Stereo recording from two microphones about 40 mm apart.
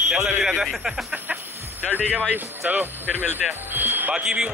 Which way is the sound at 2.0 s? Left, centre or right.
Right.